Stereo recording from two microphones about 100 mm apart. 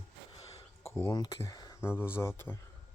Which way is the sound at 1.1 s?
40° left (ahead or behind).